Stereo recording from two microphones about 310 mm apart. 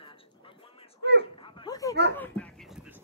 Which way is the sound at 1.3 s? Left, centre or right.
Centre.